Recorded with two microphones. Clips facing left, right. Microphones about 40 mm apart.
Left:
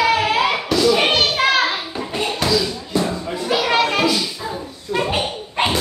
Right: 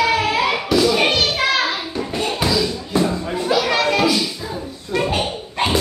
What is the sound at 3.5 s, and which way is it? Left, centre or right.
Children playing, centre.